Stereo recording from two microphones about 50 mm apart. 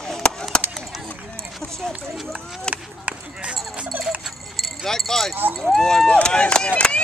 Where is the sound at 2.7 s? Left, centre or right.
Right.